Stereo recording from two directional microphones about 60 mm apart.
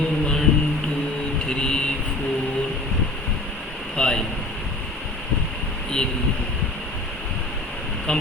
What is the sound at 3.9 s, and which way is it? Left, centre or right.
Speech, centre.